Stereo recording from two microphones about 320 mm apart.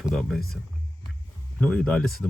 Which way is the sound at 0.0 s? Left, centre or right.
Centre.